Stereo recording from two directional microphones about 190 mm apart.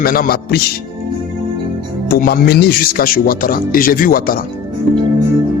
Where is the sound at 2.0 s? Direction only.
50° left (ahead or behind).